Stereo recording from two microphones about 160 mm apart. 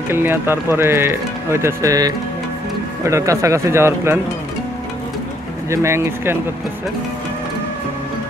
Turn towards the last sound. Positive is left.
turn(degrees=-15)  # may be behind; listen again after turning